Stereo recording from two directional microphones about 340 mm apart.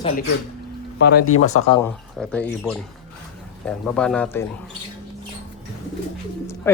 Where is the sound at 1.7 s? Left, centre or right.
Centre.